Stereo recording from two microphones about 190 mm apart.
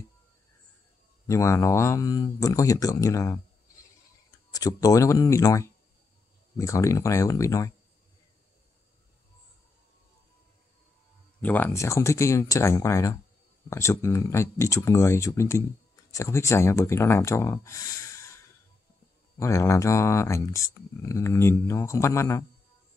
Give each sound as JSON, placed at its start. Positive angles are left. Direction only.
{"t": 1.2, "sound": "speech", "side_deg": 15}
{"t": 4.5, "sound": "speech", "side_deg": 20}
{"t": 11.4, "sound": "speech", "side_deg": 10}